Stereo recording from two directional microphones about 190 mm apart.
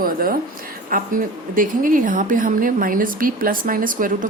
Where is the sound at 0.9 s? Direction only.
45° right (ahead or behind).